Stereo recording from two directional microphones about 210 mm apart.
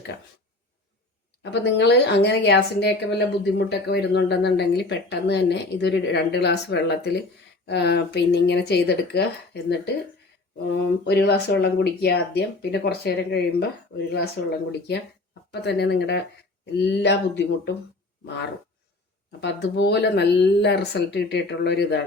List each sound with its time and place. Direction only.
1.4 s a woman's voice: 55° left (ahead or behind)
15.6 s a woman's voice: 50° left (ahead or behind)
19.4 s a woman's voice: 55° left (ahead or behind)